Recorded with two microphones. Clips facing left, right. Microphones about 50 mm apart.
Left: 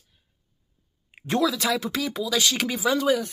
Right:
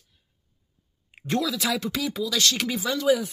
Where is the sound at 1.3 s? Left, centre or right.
Centre.